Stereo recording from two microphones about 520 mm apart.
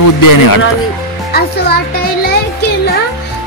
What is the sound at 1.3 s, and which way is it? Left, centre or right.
Speech, centre.